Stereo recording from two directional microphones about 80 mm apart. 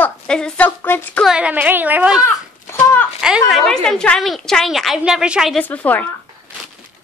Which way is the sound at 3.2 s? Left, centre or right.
Centre.